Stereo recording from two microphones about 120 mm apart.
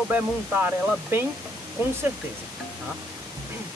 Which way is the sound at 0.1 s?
15° right (ahead or behind).